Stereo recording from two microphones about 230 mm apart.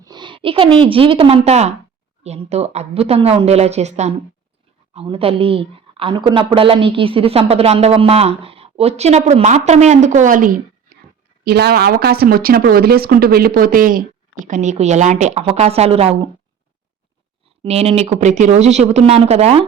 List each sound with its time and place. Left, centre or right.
0.0 s a woman's voice: centre
17.7 s a woman's voice: right